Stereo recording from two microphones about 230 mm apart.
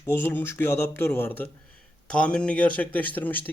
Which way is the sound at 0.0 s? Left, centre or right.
Centre.